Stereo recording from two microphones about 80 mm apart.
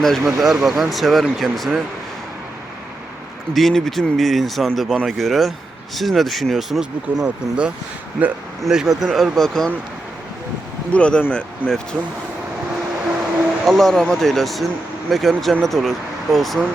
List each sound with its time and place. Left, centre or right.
0.0 s speech: centre
3.5 s speech: centre
7.1 s speech: right
7.4 s speech: centre
8.6 s speech: centre
10.9 s speech: centre
13.7 s speech: centre